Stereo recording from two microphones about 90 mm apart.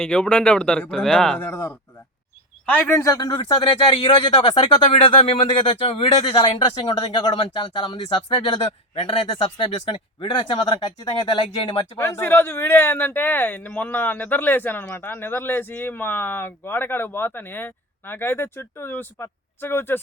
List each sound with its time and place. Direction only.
0.0 s speech: 10° left (ahead or behind)
1.4 s speech: 30° left (ahead or behind)
3.0 s speech: 40° left (ahead or behind)
3.2 s speech: 65° left (ahead or behind)
9.0 s speech: 70° left (ahead or behind)
11.9 s speech: 30° left (ahead or behind)